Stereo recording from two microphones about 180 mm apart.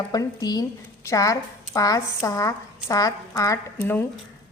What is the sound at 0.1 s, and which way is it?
A woman's voice, 20° left (ahead or behind).